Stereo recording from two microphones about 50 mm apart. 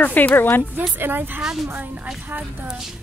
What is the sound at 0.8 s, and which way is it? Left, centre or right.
Speech, right.